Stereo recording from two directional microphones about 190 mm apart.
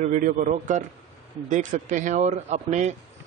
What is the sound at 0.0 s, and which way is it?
Speech, 40° right (ahead or behind).